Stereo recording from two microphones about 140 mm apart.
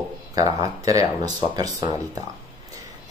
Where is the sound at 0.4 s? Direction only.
25° right (ahead or behind).